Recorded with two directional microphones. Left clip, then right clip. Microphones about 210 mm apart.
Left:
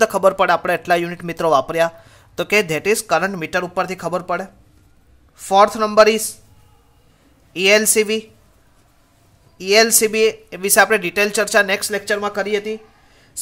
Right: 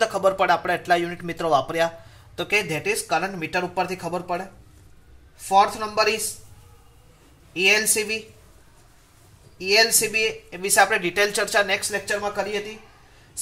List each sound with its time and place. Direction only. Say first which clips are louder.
0.0 s speech: left 6 dB; 35° left (ahead or behind)
7.5 s speech: left 6 dB; 40° left (ahead or behind)
9.6 s speech: left 5 dB; 40° left (ahead or behind)